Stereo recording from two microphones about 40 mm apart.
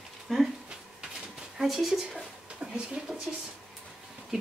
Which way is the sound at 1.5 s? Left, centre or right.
Centre.